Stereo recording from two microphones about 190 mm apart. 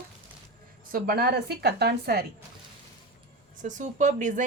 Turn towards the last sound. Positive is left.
turn(degrees=-40)  # may be behind; listen again after turning